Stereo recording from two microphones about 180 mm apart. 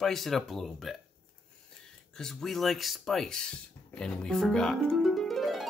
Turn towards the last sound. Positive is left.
turn(degrees=0)  # may be behind; listen again after turning